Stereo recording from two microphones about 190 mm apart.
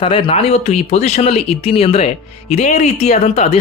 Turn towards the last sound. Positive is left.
turn(degrees=35)  # may be behind; listen again after turning